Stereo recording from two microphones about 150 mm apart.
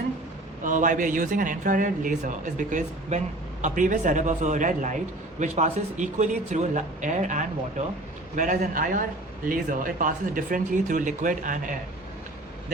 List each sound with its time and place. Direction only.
0.6 s speech: 60° right (ahead or behind)